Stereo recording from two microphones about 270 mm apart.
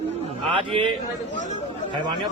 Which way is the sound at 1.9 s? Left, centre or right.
Centre.